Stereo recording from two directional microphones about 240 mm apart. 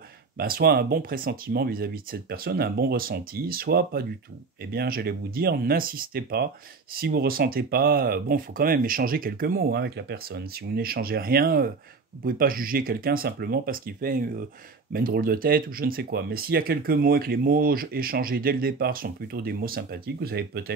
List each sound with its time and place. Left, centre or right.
0.4 s speech: right